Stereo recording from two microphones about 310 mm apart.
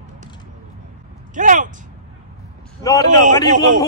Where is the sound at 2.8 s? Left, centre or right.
Centre.